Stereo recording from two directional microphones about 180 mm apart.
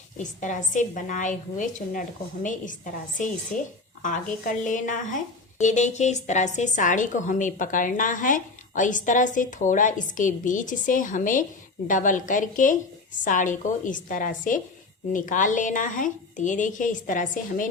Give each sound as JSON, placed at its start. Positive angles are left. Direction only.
{"t": 0.2, "sound": "a woman's voice", "side_deg": 45}